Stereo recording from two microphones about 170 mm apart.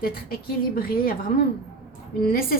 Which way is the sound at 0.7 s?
60° left (ahead or behind).